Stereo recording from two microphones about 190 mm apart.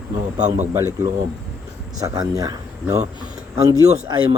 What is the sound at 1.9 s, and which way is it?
A man's voice, 20° right (ahead or behind).